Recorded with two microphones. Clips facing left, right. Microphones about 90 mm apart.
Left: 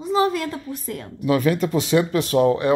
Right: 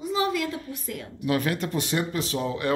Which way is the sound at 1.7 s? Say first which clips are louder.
Left 8 dB; 90° left.